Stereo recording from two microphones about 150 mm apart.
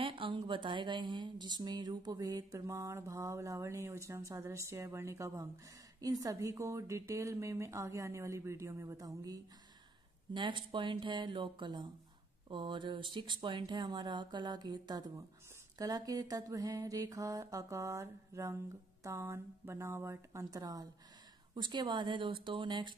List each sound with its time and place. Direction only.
0.0 s speech: 35° right (ahead or behind)